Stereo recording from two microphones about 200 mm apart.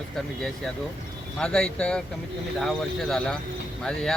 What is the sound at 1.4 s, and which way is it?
Speech, 5° left (ahead or behind).